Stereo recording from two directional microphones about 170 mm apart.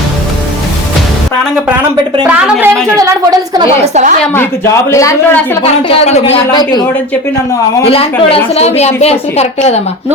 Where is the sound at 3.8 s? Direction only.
45° right (ahead or behind).